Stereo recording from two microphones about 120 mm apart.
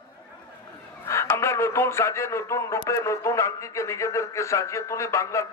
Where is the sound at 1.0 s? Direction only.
25° left (ahead or behind).